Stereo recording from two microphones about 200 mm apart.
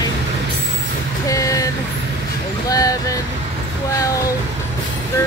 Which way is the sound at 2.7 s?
15° left (ahead or behind).